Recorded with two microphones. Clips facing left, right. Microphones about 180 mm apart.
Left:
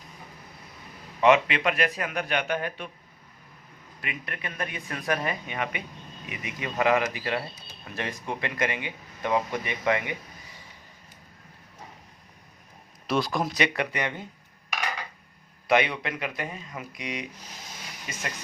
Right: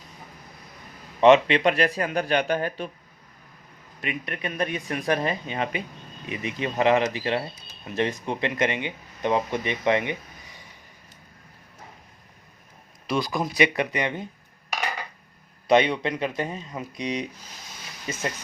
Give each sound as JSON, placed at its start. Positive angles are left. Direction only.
{"t": 1.2, "sound": "speech", "side_deg": -30}
{"t": 4.0, "sound": "speech", "side_deg": -25}
{"t": 13.1, "sound": "speech", "side_deg": 0}
{"t": 13.6, "sound": "speech", "side_deg": -20}
{"t": 15.7, "sound": "speech", "side_deg": -25}